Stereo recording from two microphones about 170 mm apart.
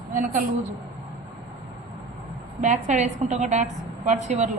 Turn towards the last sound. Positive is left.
turn(degrees=-40)  # may be behind; listen again after turning